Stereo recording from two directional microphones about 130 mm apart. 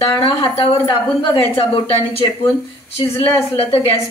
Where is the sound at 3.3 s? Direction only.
45° left (ahead or behind).